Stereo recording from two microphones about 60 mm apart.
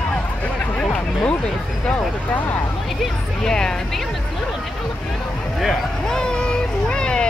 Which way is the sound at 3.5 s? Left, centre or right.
Centre.